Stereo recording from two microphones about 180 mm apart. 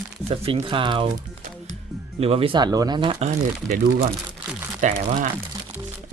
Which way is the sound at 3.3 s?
40° right (ahead or behind).